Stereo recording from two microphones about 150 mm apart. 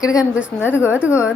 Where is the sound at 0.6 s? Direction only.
10° right (ahead or behind).